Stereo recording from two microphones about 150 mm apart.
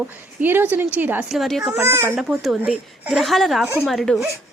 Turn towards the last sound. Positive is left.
turn(degrees=0)  # may be behind; listen again after turning